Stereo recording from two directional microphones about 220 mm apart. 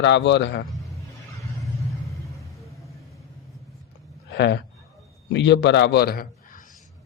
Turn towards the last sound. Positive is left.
turn(degrees=45)  # may be behind; listen again after turning